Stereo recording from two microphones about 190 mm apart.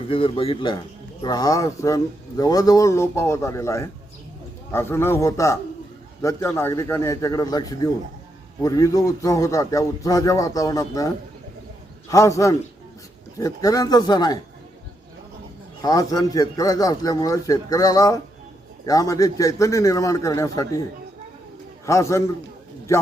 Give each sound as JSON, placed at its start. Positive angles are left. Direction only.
{"t": 0.1, "sound": "a man's voice", "side_deg": 30}
{"t": 12.1, "sound": "a man's voice", "side_deg": 15}
{"t": 15.8, "sound": "a man's voice", "side_deg": 20}
{"t": 21.8, "sound": "a man's voice", "side_deg": 15}